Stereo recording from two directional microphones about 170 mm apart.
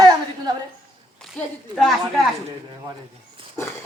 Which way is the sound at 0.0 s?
25° right (ahead or behind).